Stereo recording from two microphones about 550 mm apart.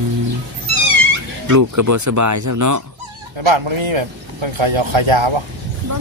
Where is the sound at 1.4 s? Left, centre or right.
Right.